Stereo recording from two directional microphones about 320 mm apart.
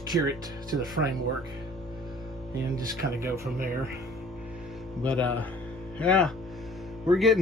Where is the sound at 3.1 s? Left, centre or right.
Centre.